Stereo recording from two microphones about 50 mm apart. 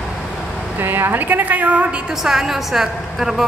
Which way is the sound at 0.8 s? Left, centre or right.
Right.